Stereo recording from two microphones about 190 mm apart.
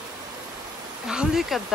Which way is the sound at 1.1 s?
Centre (ahead or behind).